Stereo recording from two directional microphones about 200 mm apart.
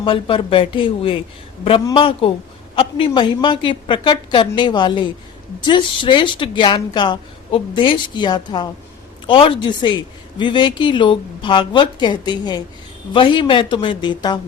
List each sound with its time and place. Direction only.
0.0 s speech: 25° left (ahead or behind)